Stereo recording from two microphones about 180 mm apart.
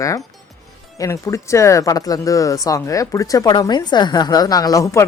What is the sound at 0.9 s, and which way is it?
Speech, 15° left (ahead or behind).